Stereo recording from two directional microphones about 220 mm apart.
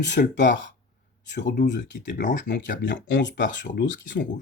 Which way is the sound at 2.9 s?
55° left (ahead or behind).